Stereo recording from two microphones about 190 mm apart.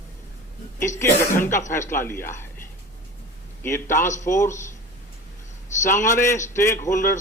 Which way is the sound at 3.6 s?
15° left (ahead or behind).